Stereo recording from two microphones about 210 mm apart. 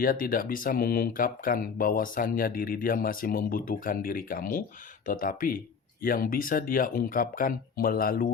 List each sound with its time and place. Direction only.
0.0 s speech: 40° left (ahead or behind)